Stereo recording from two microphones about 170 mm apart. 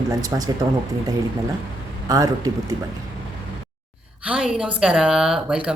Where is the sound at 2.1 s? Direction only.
20° right (ahead or behind).